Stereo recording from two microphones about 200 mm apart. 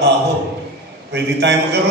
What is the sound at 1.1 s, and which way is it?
Speech, 60° right (ahead or behind).